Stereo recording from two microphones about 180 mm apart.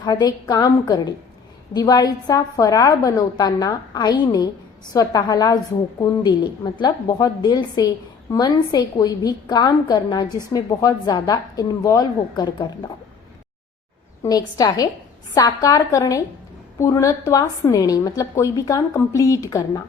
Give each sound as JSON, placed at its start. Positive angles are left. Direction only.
{"t": 0.0, "sound": "a woman's voice", "side_deg": 20}
{"t": 14.2, "sound": "a woman's voice", "side_deg": 20}